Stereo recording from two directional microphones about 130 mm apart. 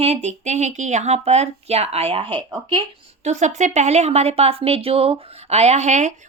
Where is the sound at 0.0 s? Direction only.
55° right (ahead or behind); by 2.8 s 35° right (ahead or behind).